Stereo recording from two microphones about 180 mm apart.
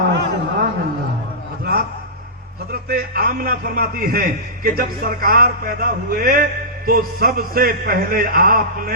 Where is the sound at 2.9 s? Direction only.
55° right (ahead or behind).